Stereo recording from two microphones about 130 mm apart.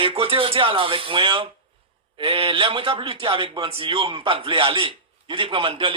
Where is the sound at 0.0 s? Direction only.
45° right (ahead or behind).